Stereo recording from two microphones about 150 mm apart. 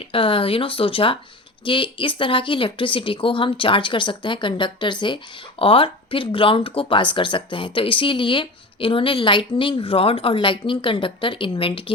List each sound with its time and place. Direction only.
0.0 s a woman's voice: 35° left (ahead or behind)